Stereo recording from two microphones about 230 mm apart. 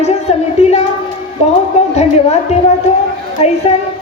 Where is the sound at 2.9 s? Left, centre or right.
Left.